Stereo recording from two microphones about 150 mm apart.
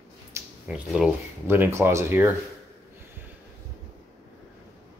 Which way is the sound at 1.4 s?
15° right (ahead or behind).